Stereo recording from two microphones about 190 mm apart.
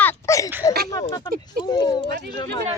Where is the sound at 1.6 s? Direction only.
20° left (ahead or behind).